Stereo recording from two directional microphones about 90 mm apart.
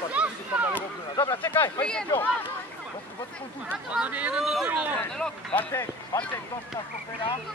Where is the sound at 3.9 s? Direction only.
15° right (ahead or behind).